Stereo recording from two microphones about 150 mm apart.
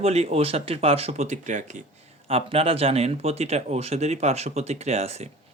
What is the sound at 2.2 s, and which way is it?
Speech, 40° right (ahead or behind).